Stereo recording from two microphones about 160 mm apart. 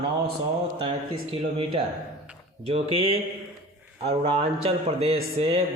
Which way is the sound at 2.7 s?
35° right (ahead or behind).